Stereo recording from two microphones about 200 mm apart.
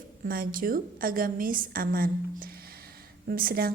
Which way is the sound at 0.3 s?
45° right (ahead or behind).